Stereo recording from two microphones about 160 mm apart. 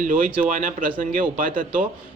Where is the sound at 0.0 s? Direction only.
60° right (ahead or behind).